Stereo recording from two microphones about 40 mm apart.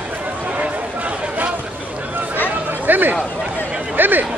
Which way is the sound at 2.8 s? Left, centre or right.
Right.